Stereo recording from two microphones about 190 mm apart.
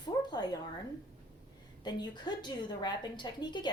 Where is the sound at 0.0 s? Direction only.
20° left (ahead or behind).